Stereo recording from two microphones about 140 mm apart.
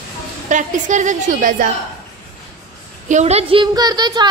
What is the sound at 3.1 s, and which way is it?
Speech, 50° right (ahead or behind).